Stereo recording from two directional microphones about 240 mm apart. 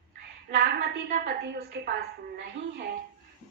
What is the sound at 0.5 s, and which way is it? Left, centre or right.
A woman's voice, right.